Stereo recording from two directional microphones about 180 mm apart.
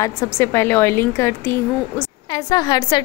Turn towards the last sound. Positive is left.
turn(degrees=20)  # may be behind; listen again after turning